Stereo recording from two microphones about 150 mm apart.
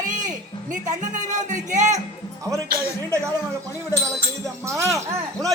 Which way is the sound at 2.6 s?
90° right.